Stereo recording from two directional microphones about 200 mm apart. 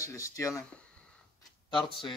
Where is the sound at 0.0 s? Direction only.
15° left (ahead or behind).